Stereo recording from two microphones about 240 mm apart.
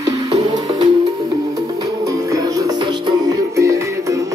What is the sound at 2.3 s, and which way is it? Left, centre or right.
Music, centre.